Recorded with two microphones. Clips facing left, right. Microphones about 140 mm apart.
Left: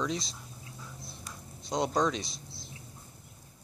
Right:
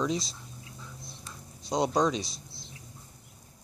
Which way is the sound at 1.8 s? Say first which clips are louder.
Right 2 dB; 10° right (ahead or behind).